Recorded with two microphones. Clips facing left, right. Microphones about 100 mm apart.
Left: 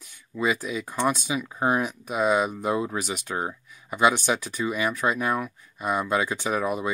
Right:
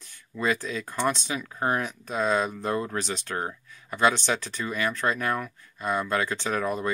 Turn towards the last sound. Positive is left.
turn(degrees=15)  # may be behind; listen again after turning